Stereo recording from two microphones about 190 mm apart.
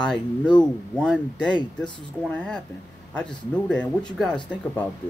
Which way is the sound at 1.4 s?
25° left (ahead or behind).